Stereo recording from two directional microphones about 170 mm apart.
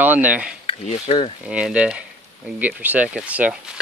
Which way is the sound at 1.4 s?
5° right (ahead or behind).